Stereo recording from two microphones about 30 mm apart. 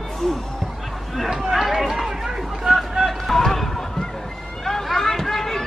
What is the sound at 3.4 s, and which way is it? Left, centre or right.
Run, centre.